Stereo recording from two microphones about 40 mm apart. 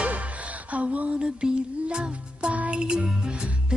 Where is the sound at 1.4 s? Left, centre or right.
Centre.